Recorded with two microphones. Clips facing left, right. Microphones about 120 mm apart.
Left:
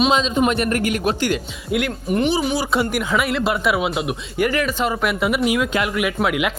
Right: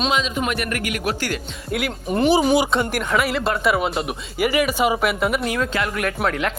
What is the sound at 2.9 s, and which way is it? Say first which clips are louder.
Speech: left 1 dB; centre (ahead or behind).